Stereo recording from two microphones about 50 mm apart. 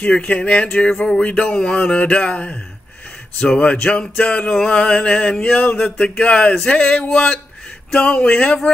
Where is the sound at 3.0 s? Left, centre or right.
Left.